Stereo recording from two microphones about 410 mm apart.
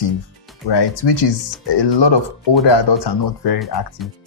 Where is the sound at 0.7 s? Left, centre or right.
Left.